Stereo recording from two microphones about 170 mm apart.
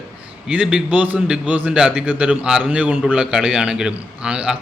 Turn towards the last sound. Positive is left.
turn(degrees=-5)  # may be behind; listen again after turning